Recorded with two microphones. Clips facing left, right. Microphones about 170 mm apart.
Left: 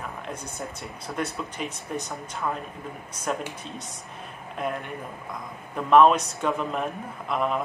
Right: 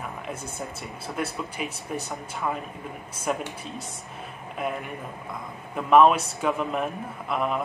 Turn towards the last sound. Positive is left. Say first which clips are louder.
# even
turn(degrees=0)  # may be behind; listen again after turning